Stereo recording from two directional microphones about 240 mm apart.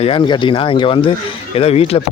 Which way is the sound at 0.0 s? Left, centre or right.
Left.